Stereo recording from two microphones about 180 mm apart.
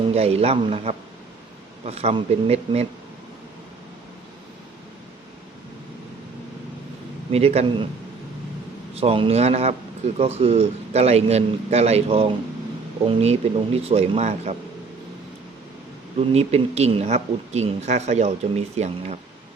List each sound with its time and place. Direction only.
0.1 s speech: 35° right (ahead or behind)
7.3 s speech: 35° right (ahead or behind)
9.0 s speech: 30° right (ahead or behind)
16.1 s speech: 35° right (ahead or behind)